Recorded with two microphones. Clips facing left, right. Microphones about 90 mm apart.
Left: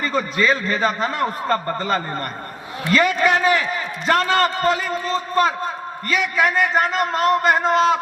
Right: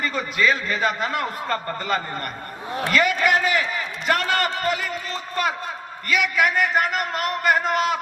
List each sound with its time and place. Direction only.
0.0 s a man's voice: 35° left (ahead or behind)